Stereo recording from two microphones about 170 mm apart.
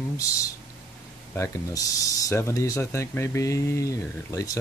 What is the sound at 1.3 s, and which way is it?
Speech, 15° left (ahead or behind).